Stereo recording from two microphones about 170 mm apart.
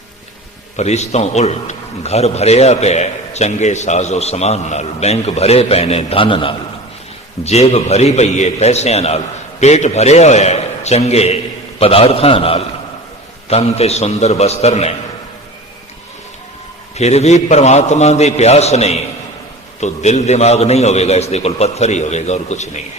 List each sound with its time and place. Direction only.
0.8 s a man's voice: 40° left (ahead or behind)
16.9 s a man's voice: 40° left (ahead or behind)